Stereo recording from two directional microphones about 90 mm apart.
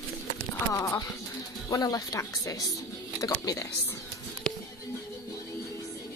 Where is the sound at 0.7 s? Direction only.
35° left (ahead or behind).